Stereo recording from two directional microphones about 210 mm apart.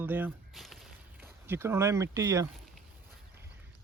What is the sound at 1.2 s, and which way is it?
Speech, 10° right (ahead or behind).